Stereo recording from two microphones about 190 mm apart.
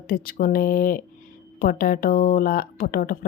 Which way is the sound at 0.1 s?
50° left (ahead or behind).